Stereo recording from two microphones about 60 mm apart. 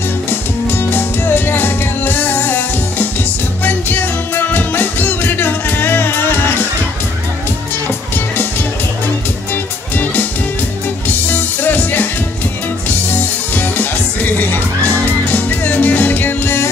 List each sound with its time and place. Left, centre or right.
0.3 s music: left
11.1 s music: left
13.1 s music: left